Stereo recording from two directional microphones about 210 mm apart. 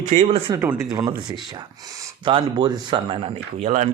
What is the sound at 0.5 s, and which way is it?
Speech, 10° right (ahead or behind).